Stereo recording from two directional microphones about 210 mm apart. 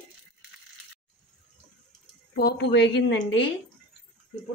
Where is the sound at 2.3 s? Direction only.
50° left (ahead or behind).